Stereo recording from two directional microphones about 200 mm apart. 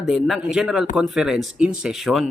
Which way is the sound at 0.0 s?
Centre (ahead or behind).